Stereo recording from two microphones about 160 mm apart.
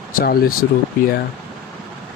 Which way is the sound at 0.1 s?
65° left (ahead or behind).